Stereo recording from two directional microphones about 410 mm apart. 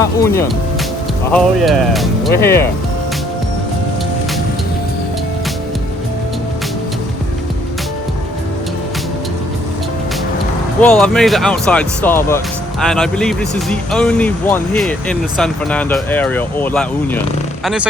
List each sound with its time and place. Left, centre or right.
0.0 s speech: centre
10.8 s speech: centre